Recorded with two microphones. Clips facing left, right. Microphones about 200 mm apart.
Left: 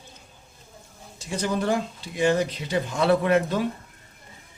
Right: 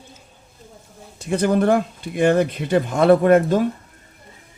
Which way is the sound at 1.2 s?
55° right (ahead or behind).